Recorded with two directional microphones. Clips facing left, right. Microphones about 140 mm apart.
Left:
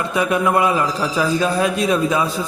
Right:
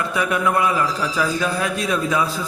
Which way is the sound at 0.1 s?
25° left (ahead or behind).